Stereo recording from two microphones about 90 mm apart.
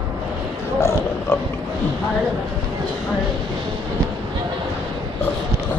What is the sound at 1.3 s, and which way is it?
Pig, 30° left (ahead or behind).